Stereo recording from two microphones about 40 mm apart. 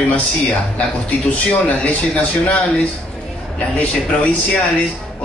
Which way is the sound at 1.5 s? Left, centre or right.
Left.